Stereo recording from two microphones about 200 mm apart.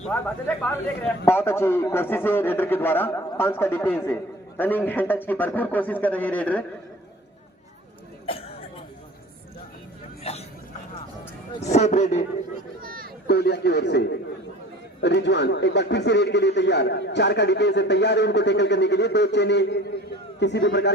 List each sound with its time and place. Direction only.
0.1 s a man's voice: 5° left (ahead or behind)
8.3 s cough: 30° left (ahead or behind)
11.6 s a man's voice: 35° left (ahead or behind)
12.8 s a sound: 45° right (ahead or behind)
13.2 s a man's voice: 55° left (ahead or behind)